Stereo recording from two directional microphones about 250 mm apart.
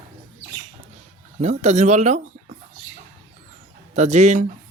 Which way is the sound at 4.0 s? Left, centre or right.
Right.